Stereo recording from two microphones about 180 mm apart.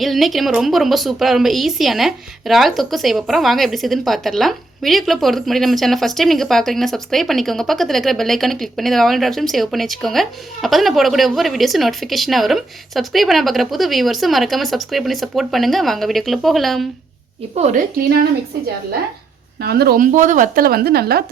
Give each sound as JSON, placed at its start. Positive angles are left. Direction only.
{"t": 0.0, "sound": "a woman's voice", "side_deg": 0}
{"t": 17.5, "sound": "a woman's voice", "side_deg": -40}
{"t": 19.6, "sound": "speech", "side_deg": -60}